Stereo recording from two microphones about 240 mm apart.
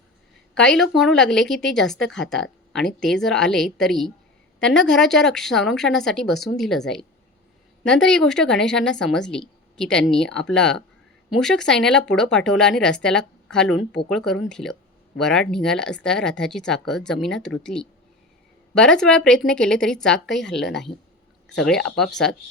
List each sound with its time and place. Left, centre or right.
0.7 s speech: centre